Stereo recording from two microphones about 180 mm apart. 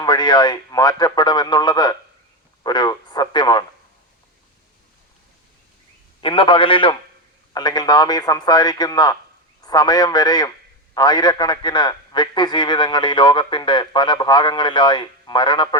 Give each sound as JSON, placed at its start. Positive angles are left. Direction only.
{"t": 0.0, "sound": "a man's voice", "side_deg": 25}
{"t": 6.2, "sound": "a man's voice", "side_deg": 30}